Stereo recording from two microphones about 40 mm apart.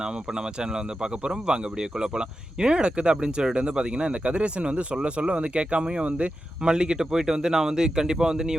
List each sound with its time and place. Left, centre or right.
0.6 s speech: centre